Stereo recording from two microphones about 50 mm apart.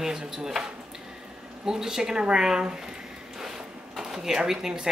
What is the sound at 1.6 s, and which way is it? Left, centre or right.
Speech, centre.